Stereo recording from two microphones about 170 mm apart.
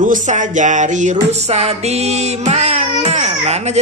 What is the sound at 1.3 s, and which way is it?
Music, 40° right (ahead or behind).